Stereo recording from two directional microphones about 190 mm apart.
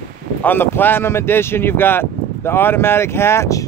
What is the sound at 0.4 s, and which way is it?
Speech, 10° left (ahead or behind).